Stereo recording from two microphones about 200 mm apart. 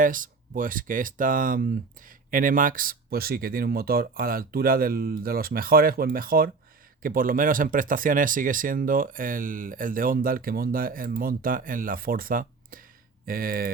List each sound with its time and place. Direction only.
0.0 s speech: 45° right (ahead or behind)